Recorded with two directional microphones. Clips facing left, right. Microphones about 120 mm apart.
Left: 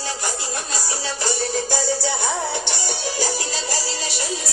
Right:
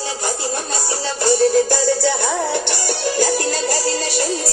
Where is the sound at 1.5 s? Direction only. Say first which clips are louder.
Right 7 dB; 60° right (ahead or behind).